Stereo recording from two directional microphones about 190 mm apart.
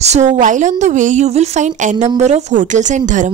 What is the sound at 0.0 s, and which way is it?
Speech, 35° right (ahead or behind).